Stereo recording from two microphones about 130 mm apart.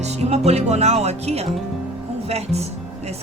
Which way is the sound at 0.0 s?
55° right (ahead or behind).